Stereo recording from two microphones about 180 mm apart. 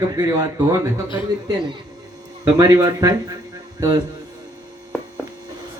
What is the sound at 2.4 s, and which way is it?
Speech, 20° right (ahead or behind).